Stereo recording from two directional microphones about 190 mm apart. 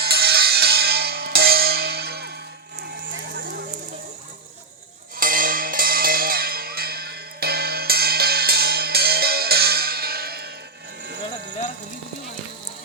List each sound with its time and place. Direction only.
0.0 s music: 55° right (ahead or behind)
3.3 s a sound: 55° right (ahead or behind)
5.1 s music: 50° right (ahead or behind)